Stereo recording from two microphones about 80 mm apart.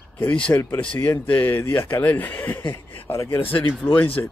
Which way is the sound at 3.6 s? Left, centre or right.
Left.